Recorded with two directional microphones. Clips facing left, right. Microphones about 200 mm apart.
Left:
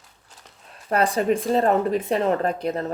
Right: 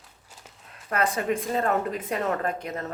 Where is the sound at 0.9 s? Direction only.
35° left (ahead or behind).